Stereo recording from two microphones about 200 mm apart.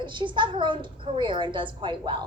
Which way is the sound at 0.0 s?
25° right (ahead or behind).